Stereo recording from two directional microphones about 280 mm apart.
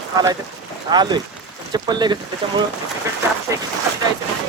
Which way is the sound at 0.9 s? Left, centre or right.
Centre.